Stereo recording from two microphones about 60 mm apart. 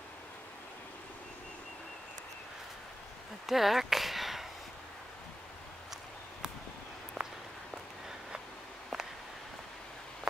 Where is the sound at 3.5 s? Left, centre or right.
Centre.